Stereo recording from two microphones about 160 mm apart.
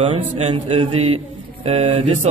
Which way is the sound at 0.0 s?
40° right (ahead or behind).